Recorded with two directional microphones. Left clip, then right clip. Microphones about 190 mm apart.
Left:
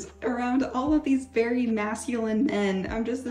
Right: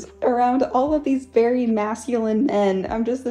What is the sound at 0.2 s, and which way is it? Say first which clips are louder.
A woman's voice: right 9 dB; 20° right (ahead or behind).